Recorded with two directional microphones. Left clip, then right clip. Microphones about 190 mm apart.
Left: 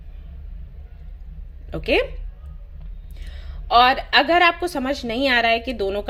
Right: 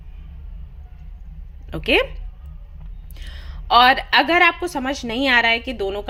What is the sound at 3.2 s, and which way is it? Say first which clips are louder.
A woman's voice: right 4 dB; 20° right (ahead or behind).